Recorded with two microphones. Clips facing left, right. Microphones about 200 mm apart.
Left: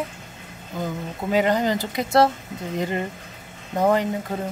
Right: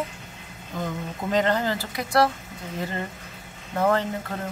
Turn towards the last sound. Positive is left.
turn(degrees=15)  # may be behind; listen again after turning